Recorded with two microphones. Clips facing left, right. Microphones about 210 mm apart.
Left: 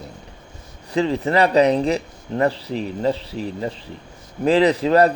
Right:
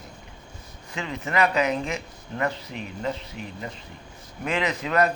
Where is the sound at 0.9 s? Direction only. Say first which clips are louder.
Left 9 dB; 35° left (ahead or behind).